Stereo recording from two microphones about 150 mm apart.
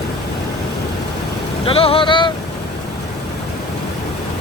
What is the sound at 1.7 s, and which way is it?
Vehicle, 40° left (ahead or behind).